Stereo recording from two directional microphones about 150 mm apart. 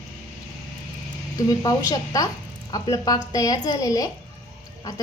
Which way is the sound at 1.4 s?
25° left (ahead or behind).